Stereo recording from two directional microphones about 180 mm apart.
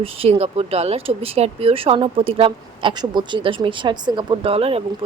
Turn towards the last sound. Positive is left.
turn(degrees=-35)  # may be behind; listen again after turning